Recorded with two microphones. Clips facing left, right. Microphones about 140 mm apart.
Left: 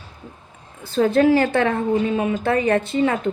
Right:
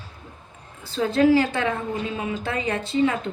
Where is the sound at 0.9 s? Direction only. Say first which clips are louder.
Left 3 dB; 55° left (ahead or behind).